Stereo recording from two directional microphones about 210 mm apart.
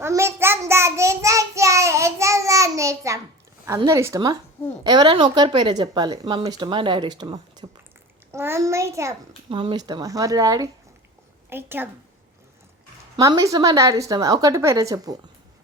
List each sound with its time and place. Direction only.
0.0 s child singing: 10° right (ahead or behind)
3.7 s a woman's voice: 15° right (ahead or behind)
9.5 s a woman's voice: 25° right (ahead or behind)
13.1 s a woman's voice: 15° right (ahead or behind)